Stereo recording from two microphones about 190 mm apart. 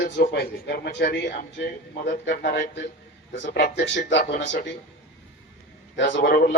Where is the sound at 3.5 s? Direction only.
65° left (ahead or behind).